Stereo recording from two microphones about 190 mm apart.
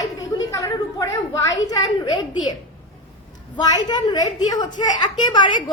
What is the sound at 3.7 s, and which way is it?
A woman's voice, 20° left (ahead or behind).